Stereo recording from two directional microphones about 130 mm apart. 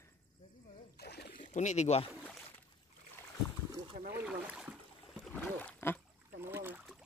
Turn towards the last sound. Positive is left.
turn(degrees=-15)  # may be behind; listen again after turning